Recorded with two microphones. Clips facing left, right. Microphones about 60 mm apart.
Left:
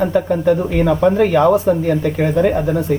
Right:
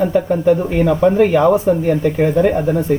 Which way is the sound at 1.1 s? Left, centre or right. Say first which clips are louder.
Right 1 dB; centre.